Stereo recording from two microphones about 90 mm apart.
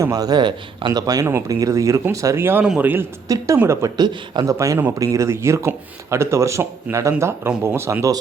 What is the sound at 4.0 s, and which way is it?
Speech, 55° right (ahead or behind).